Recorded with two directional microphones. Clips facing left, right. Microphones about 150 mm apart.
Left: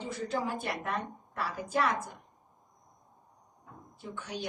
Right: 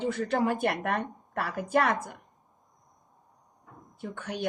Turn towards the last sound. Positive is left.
turn(degrees=-55)  # may be behind; listen again after turning